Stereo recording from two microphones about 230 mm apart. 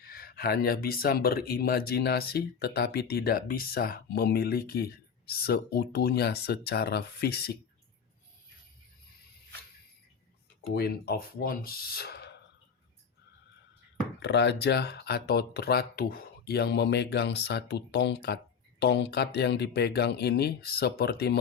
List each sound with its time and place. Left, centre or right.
0.1 s speech: left
10.7 s speech: left
14.2 s speech: left